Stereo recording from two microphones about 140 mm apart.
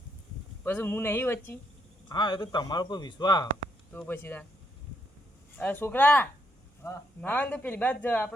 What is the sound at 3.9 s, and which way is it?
Speech, 15° left (ahead or behind).